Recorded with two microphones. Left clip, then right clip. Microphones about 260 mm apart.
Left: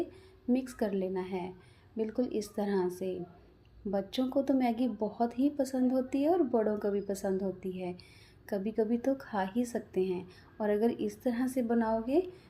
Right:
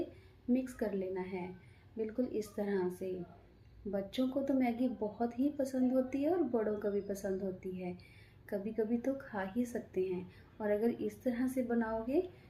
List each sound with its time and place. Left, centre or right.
0.5 s a woman's voice: left